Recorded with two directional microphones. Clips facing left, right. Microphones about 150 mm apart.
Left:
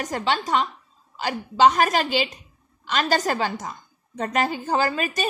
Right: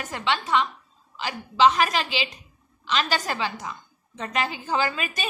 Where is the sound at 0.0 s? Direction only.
40° left (ahead or behind).